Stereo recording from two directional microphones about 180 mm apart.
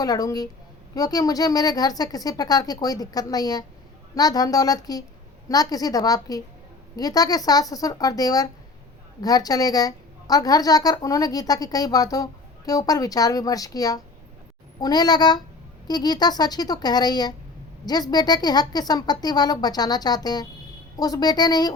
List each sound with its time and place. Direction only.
0.0 s a woman's voice: 20° left (ahead or behind)